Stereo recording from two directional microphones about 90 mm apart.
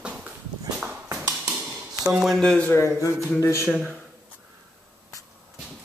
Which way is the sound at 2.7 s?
35° left (ahead or behind).